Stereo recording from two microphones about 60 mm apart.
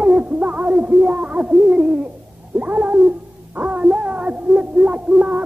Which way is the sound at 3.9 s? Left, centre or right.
Right.